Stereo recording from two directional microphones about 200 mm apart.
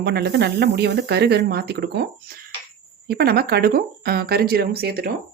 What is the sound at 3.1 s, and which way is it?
Speech, 50° right (ahead or behind).